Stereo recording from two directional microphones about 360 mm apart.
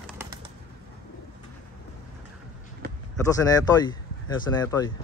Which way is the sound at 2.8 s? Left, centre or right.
Right.